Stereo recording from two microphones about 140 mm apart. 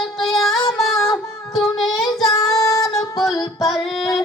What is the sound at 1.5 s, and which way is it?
Child singing, centre (ahead or behind).